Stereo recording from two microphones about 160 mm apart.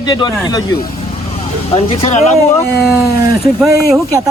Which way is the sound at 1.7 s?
40° left (ahead or behind).